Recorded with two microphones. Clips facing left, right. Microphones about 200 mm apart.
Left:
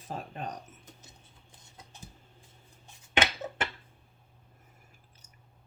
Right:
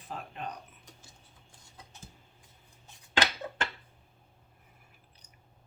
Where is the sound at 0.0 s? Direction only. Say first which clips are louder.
Left 2 dB; 40° left (ahead or behind).